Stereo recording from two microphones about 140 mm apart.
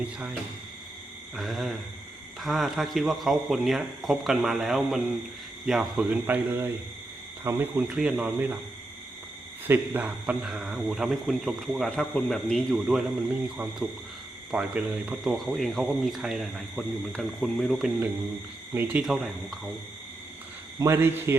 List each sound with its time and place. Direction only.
0.0 s speech: 10° right (ahead or behind)
1.4 s speech: centre (ahead or behind)
9.6 s speech: 15° right (ahead or behind)
14.5 s speech: 5° right (ahead or behind)
18.7 s speech: 15° right (ahead or behind)
19.0 s speech: centre (ahead or behind)
20.7 s a man's voice: 20° right (ahead or behind)